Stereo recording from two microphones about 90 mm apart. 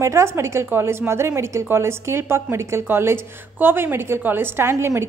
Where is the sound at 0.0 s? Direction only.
30° right (ahead or behind).